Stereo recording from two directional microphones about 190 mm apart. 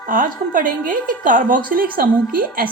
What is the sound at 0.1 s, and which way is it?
A woman's voice, 45° right (ahead or behind).